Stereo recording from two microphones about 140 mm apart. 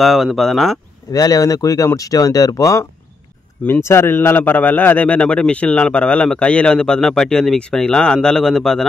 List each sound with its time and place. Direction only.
0.0 s speech: centre (ahead or behind)
1.1 s a man's voice: 25° left (ahead or behind); by 8.8 s 5° left (ahead or behind)